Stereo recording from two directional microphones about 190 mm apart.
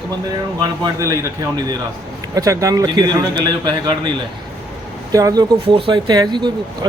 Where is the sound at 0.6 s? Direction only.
20° right (ahead or behind).